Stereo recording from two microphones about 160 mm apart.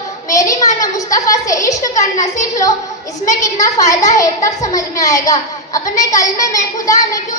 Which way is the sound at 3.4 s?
20° left (ahead or behind).